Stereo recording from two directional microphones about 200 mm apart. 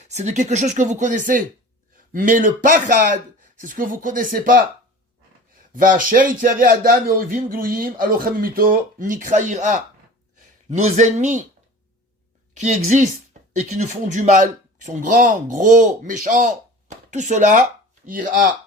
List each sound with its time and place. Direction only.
0.1 s speech: 35° right (ahead or behind)
5.7 s speech: 45° right (ahead or behind)
13.5 s speech: 35° right (ahead or behind)